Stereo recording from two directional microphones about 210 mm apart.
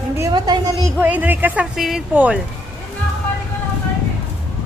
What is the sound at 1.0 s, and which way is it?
Speech, 10° right (ahead or behind).